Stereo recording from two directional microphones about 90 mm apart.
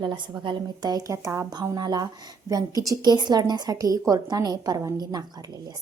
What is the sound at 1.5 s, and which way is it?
A woman's voice, 45° right (ahead or behind).